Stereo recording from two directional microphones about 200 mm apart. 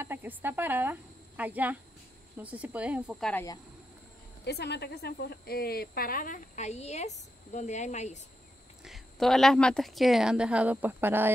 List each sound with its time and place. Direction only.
0.0 s speech: 10° right (ahead or behind)
4.5 s speech: 55° left (ahead or behind); by 8.2 s 35° left (ahead or behind)
8.8 s a woman's voice: centre (ahead or behind)